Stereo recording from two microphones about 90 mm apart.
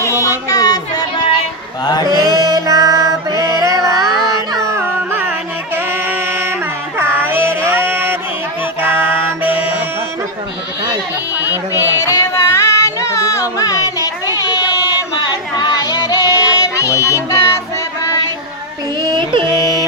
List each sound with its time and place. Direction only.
0.0 s music: 35° left (ahead or behind)
1.8 s mantra: 50° left (ahead or behind)
2.0 s music: 45° right (ahead or behind)
4.7 s music: 25° right (ahead or behind)
5.7 s a sound: 25° right (ahead or behind)
7.0 s child singing: 25° right (ahead or behind)
11.3 s music: 25° right (ahead or behind)
11.7 s female singing: 40° left (ahead or behind)
19.0 s music: 65° right (ahead or behind)
19.5 s music: 40° left (ahead or behind)